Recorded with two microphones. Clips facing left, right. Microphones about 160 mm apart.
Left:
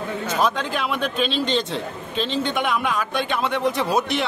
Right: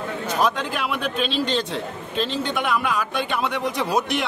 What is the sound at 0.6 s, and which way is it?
A man's voice, 5° right (ahead or behind).